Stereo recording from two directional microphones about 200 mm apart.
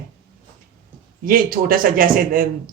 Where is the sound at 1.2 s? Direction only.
45° right (ahead or behind).